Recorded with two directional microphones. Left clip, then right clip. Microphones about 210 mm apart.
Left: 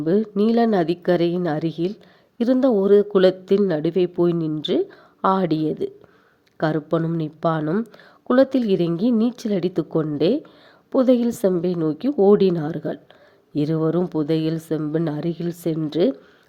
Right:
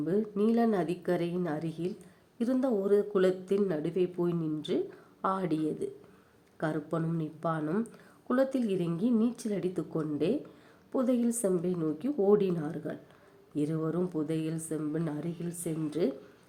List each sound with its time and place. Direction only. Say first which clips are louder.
0.0 s a woman's voice: left 10 dB; 40° left (ahead or behind)